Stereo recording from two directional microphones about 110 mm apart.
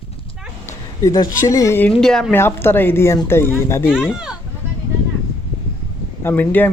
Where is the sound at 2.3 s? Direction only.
20° left (ahead or behind).